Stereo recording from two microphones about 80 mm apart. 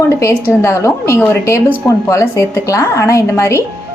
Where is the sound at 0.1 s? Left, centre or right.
Left.